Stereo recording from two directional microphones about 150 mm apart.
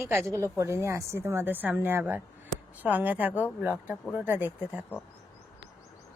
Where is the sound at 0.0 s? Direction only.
15° right (ahead or behind).